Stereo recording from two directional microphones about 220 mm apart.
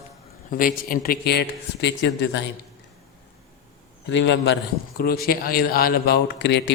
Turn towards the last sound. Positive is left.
turn(degrees=50)  # may be behind; listen again after turning